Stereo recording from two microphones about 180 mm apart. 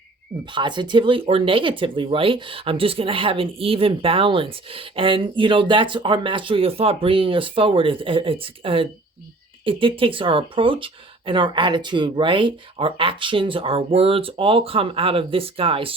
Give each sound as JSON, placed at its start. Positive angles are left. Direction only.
{"t": 0.5, "sound": "speech", "side_deg": -25}